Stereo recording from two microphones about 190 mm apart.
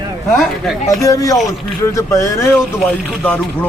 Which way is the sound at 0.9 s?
15° left (ahead or behind).